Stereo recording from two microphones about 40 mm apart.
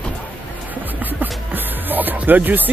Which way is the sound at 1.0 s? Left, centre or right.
Right.